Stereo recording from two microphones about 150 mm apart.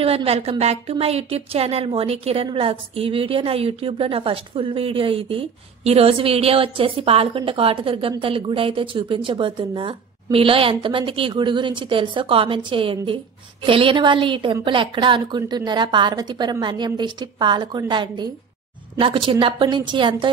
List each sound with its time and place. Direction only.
0.0 s a woman's voice: 40° right (ahead or behind)